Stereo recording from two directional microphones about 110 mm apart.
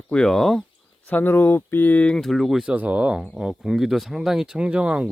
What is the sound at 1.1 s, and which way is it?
Speech, 15° left (ahead or behind).